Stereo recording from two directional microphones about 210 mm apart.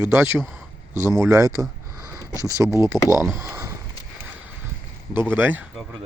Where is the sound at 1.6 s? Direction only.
15° right (ahead or behind).